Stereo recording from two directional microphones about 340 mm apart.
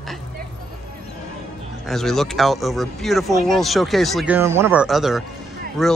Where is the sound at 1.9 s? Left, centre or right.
Centre.